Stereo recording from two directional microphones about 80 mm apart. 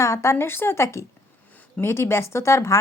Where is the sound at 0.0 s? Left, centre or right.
Left.